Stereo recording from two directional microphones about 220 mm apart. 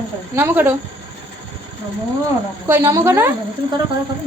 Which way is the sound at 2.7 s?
15° right (ahead or behind).